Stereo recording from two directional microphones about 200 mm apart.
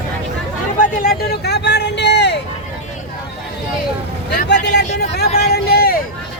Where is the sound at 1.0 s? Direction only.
50° left (ahead or behind).